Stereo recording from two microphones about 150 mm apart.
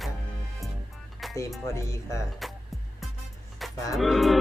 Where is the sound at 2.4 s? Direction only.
Centre (ahead or behind).